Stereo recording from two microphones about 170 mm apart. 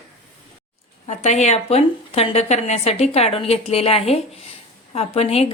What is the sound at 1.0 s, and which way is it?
A woman's voice, 40° left (ahead or behind).